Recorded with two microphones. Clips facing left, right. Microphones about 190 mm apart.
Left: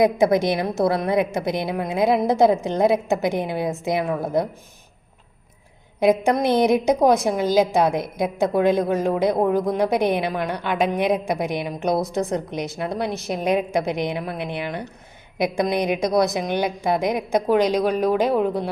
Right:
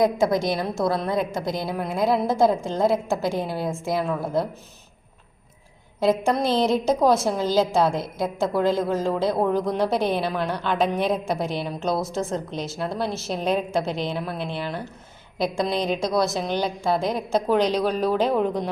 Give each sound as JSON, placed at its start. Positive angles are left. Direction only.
{"t": 0.0, "sound": "a woman's voice", "side_deg": 20}
{"t": 6.0, "sound": "a woman's voice", "side_deg": 15}